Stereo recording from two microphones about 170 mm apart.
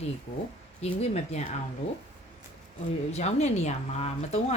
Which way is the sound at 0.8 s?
40° left (ahead or behind).